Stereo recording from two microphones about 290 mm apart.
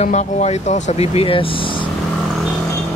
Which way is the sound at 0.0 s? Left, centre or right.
Left.